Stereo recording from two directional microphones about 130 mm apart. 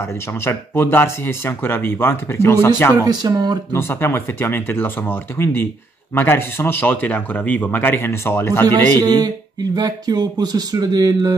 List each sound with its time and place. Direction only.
0.0 s speech: 20° left (ahead or behind)
3.0 s speech: 30° right (ahead or behind)
3.7 s speech: 15° left (ahead or behind)
8.6 s speech: 30° right (ahead or behind)